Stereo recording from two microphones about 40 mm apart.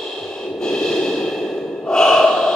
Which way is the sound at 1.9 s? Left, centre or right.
Centre.